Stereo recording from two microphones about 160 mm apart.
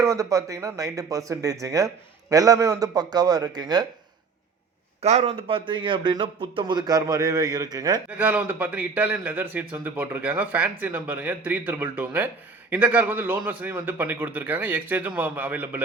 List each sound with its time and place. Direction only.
0.0 s a man's voice: 20° right (ahead or behind)
5.0 s a man's voice: 40° right (ahead or behind); by 8.0 s 25° right (ahead or behind)
8.2 s a man's voice: 10° right (ahead or behind)